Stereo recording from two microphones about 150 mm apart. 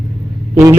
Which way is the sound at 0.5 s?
20° right (ahead or behind).